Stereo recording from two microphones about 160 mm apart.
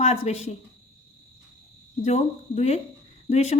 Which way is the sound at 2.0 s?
45° left (ahead or behind).